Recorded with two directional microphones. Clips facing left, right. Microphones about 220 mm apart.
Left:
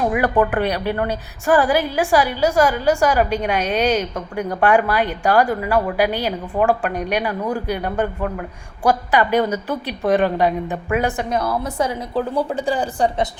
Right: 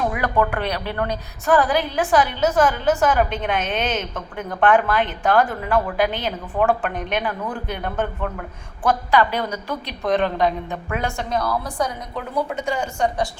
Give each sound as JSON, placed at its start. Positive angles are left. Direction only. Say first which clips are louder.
{"t": 0.0, "sound": "a woman's voice", "louder": "left 4 dB", "side_deg": 15}